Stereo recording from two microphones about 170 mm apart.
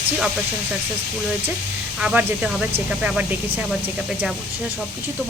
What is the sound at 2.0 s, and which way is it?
Speech, 10° right (ahead or behind).